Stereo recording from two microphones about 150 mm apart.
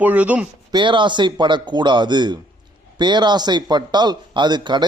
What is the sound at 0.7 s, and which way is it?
A man's voice, 30° right (ahead or behind).